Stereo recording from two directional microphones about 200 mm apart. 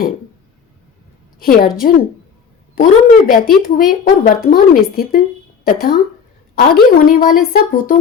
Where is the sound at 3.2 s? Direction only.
45° left (ahead or behind).